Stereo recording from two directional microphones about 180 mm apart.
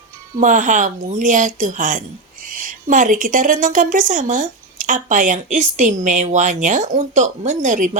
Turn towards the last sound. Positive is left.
turn(degrees=-45)  # may be behind; listen again after turning